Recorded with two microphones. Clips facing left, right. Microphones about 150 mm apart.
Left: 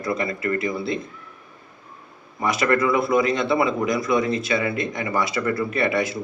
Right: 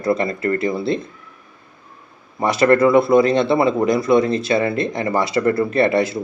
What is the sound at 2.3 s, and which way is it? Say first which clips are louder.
Speech: right 6 dB; 30° right (ahead or behind).